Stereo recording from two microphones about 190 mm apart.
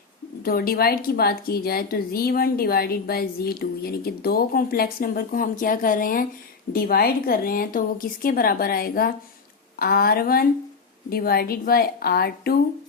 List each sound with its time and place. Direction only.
0.4 s a woman's voice: 50° left (ahead or behind)